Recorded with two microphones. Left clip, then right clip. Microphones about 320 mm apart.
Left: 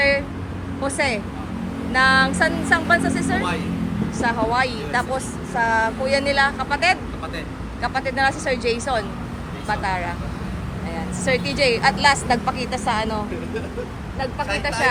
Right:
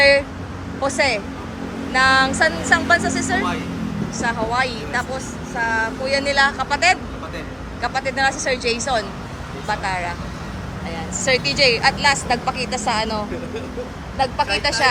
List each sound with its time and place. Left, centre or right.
0.8 s speech: centre
11.3 s speech: centre